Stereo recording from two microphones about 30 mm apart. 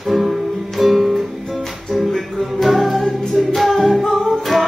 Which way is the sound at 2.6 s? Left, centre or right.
Centre.